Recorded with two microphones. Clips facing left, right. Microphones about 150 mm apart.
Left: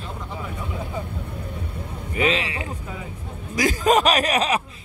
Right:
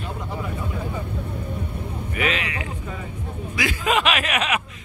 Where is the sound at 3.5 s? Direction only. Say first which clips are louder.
Left 4 dB; 40° left (ahead or behind).